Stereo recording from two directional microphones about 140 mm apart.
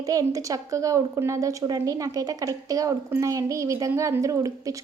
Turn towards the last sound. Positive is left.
turn(degrees=-25)  # may be behind; listen again after turning